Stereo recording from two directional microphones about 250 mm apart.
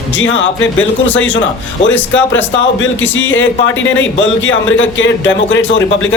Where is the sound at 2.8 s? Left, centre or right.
Left.